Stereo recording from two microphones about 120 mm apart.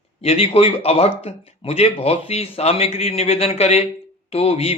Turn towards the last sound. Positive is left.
turn(degrees=55)  # may be behind; listen again after turning